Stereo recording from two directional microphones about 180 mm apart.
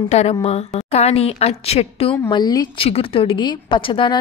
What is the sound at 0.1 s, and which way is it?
A woman's voice, 35° left (ahead or behind).